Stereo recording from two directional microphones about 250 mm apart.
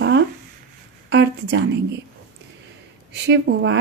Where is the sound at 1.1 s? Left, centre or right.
Right.